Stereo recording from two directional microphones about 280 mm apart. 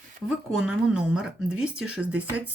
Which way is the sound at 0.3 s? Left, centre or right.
Centre.